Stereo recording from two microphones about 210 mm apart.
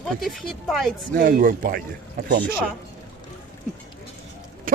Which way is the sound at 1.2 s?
45° right (ahead or behind).